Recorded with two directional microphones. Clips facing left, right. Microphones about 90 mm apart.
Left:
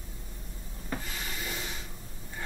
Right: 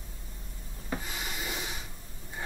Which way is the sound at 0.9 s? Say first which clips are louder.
Right 1 dB; 15° right (ahead or behind).